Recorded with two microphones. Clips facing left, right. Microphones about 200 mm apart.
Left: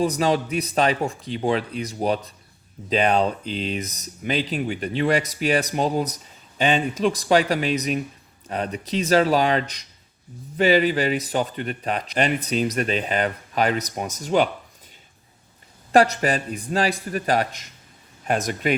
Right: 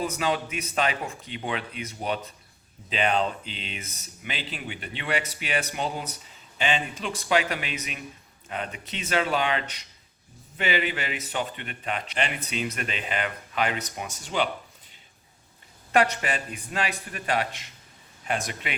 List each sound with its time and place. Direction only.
0.0 s speech: 35° left (ahead or behind)
15.9 s speech: 35° left (ahead or behind)